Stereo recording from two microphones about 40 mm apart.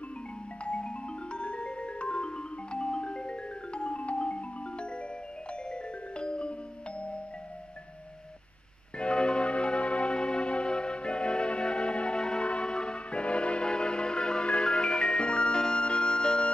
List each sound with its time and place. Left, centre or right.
0.7 s music: left
8.9 s music: left